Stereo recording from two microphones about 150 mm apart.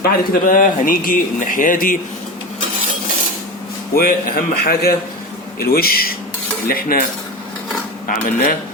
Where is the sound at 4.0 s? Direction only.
85° left.